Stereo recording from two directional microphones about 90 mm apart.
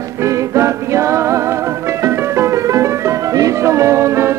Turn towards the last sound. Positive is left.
turn(degrees=-30)  # may be behind; listen again after turning